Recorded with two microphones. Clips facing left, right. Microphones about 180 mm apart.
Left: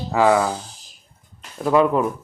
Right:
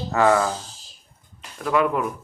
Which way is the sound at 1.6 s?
30° left (ahead or behind).